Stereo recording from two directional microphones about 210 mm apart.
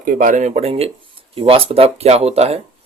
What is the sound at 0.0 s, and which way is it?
Speech, 40° right (ahead or behind).